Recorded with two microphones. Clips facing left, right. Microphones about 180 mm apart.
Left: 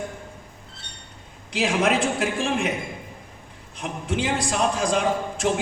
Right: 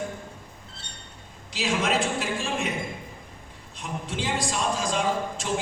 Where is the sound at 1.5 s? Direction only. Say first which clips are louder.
Left 4 dB; 60° left (ahead or behind).